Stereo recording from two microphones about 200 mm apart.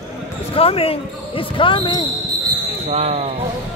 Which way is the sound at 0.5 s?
30° left (ahead or behind).